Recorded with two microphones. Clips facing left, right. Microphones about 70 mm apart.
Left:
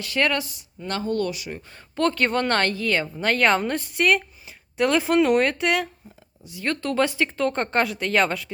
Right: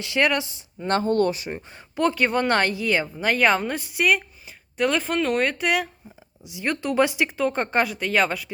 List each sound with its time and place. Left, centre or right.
0.0 s speech: centre
0.9 s speech: right; by 5.9 s centre
6.4 s speech: centre